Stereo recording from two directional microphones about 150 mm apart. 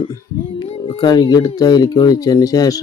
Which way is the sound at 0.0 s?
35° left (ahead or behind).